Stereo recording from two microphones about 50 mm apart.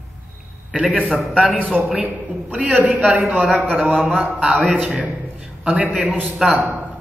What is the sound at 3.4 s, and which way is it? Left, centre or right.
Speech, centre.